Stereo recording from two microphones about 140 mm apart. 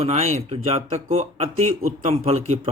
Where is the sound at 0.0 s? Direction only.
50° right (ahead or behind).